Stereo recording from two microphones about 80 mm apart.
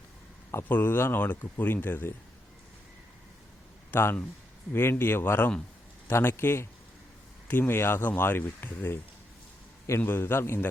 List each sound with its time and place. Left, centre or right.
0.5 s speech: left
3.9 s speech: left
10.0 s speech: left